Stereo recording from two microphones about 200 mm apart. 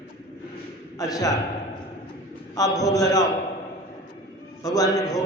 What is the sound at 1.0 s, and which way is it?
Speech, 15° left (ahead or behind).